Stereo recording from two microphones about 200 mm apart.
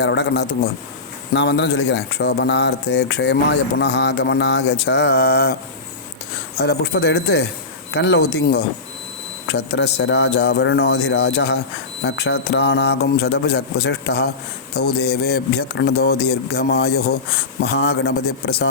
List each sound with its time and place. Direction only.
0.0 s speech: 60° left (ahead or behind)
6.6 s speech: 55° left (ahead or behind)